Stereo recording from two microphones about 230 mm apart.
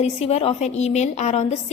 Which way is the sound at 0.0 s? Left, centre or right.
Left.